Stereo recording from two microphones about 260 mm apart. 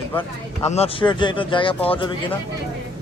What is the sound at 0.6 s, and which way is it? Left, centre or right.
Speech, left.